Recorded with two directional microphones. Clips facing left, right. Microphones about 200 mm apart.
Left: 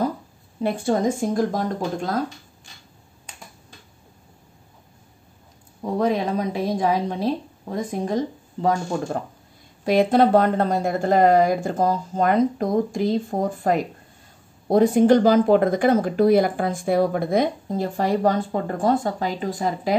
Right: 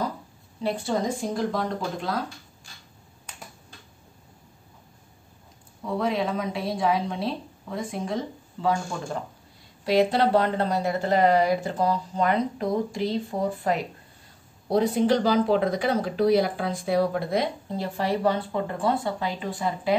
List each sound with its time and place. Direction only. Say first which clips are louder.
0.6 s speech: left 5 dB; 50° left (ahead or behind)
5.8 s a woman's voice: left 4 dB; 40° left (ahead or behind)